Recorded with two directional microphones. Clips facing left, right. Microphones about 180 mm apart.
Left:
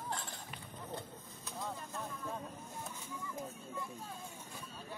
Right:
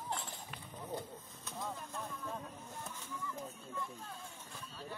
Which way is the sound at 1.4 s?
Centre (ahead or behind).